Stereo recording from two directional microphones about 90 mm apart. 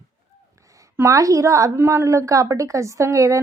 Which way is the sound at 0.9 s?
35° right (ahead or behind).